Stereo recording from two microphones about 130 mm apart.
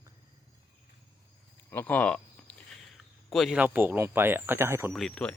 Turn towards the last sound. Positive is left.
turn(degrees=5)  # may be behind; listen again after turning